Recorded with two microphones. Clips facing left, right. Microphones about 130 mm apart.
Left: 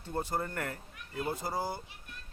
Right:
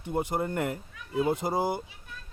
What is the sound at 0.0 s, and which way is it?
Speech, 15° right (ahead or behind).